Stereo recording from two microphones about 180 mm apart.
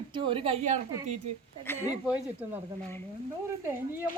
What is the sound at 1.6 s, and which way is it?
Speech, 10° left (ahead or behind).